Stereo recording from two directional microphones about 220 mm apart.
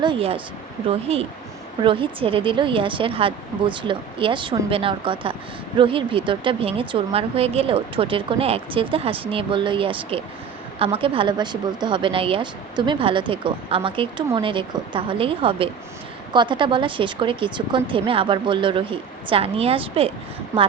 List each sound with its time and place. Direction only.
0.0 s a woman's voice: 25° right (ahead or behind)